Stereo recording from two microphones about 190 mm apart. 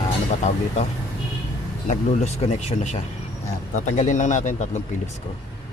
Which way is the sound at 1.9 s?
35° left (ahead or behind).